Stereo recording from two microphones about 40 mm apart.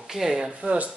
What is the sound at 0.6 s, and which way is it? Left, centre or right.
Speech, right.